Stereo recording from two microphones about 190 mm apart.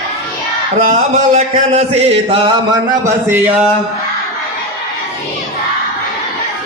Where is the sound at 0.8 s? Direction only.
45° right (ahead or behind).